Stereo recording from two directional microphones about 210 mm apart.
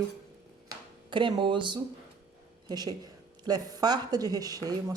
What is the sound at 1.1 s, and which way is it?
A woman's voice, 25° right (ahead or behind).